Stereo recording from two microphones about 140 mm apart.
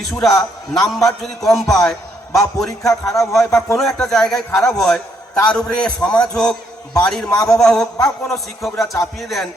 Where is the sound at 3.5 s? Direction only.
20° left (ahead or behind).